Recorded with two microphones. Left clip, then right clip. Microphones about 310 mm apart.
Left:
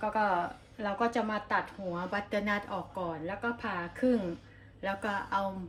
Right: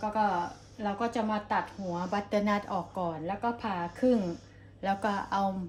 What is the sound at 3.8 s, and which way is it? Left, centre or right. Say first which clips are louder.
A woman's voice: right 3 dB; centre.